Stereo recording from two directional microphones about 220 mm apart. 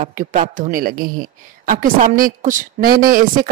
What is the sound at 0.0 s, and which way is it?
A woman's voice, 40° right (ahead or behind).